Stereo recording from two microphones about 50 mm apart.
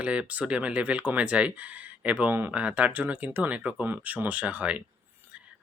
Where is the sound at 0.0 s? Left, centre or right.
Right.